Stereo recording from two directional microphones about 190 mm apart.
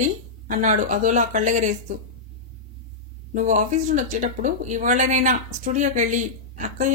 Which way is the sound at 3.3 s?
40° right (ahead or behind).